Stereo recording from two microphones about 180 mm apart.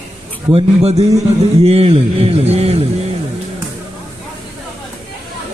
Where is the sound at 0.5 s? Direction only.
35° right (ahead or behind).